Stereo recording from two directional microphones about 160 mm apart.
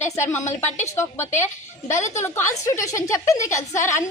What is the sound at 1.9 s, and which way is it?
Speech, 50° left (ahead or behind).